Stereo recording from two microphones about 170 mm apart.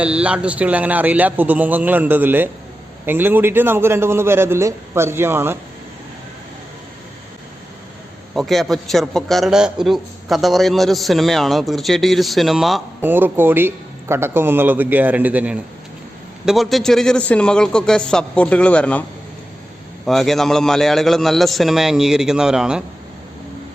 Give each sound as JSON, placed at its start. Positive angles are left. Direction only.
{"t": 0.0, "sound": "speech", "side_deg": -5}
{"t": 8.4, "sound": "a man's voice", "side_deg": 0}
{"t": 13.0, "sound": "a man's voice", "side_deg": -10}
{"t": 20.1, "sound": "a man's voice", "side_deg": 0}